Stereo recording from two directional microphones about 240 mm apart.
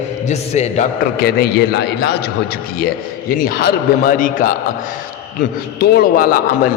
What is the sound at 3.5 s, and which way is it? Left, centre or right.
Speech, left.